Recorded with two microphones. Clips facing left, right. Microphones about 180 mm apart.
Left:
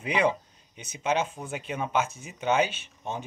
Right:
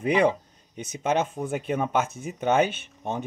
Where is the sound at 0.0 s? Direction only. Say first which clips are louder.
Right 4 dB; 50° right (ahead or behind).